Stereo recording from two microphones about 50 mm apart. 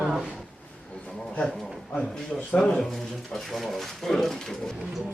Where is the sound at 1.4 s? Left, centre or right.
Centre.